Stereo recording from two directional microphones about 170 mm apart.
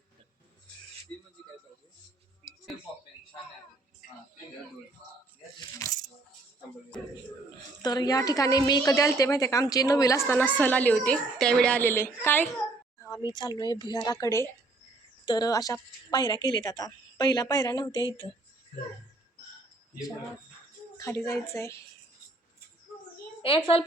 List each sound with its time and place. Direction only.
5.5 s a sound: 20° left (ahead or behind)
7.8 s a woman's voice: 25° left (ahead or behind)
21.0 s a woman's voice: 15° left (ahead or behind)
23.4 s a child's voice: 30° left (ahead or behind)